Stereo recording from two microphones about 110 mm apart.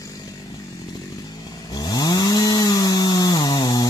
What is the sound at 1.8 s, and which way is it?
Chainsaw, 35° left (ahead or behind).